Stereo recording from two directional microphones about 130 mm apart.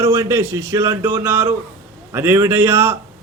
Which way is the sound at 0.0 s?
20° right (ahead or behind).